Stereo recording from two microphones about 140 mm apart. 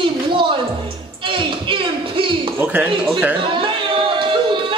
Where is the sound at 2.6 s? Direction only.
10° right (ahead or behind).